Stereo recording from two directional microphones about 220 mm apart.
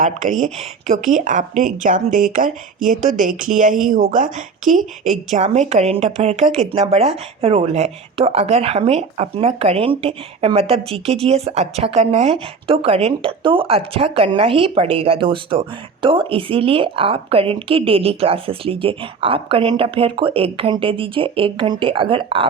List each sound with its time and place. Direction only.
0.4 s a woman's voice: 35° right (ahead or behind)